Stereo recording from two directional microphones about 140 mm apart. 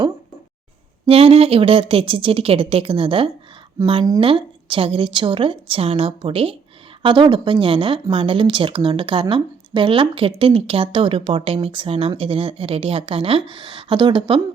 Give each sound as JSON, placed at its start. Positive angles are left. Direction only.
{"t": 1.0, "sound": "a woman's voice", "side_deg": -45}